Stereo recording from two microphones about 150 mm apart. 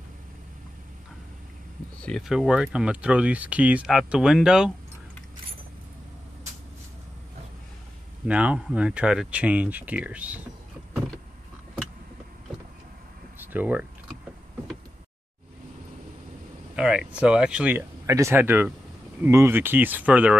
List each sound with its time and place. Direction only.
2.0 s speech: 5° left (ahead or behind)
8.3 s speech: 10° right (ahead or behind)
13.4 s speech: 10° right (ahead or behind)
16.7 s speech: 5° right (ahead or behind)
18.0 s speech: 20° right (ahead or behind)